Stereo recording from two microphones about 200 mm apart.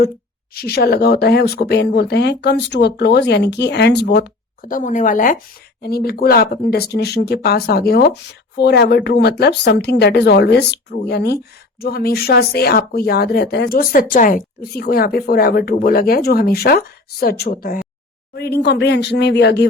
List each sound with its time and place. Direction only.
0.5 s speech: 50° left (ahead or behind)
5.8 s speech: 50° left (ahead or behind)